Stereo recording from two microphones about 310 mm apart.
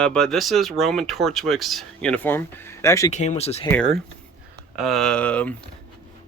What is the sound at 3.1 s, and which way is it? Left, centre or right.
Speech, left.